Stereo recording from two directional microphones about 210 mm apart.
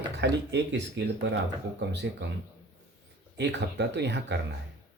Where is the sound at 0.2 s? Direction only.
55° right (ahead or behind).